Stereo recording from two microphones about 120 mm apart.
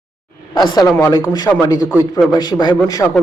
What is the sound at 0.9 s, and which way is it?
A man's voice, 25° left (ahead or behind).